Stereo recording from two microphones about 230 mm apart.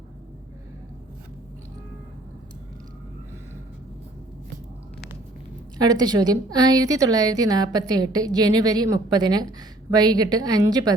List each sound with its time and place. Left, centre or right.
5.8 s a woman's voice: centre